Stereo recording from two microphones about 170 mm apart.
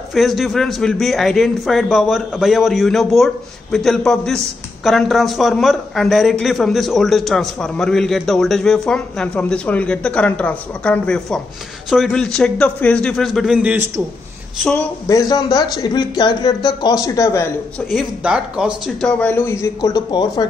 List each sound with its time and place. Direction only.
0.1 s a man's voice: centre (ahead or behind)
14.6 s a woman's voice: 5° left (ahead or behind)
15.0 s speech: 20° left (ahead or behind)
17.7 s a man's voice: centre (ahead or behind); by 20.4 s 25° left (ahead or behind)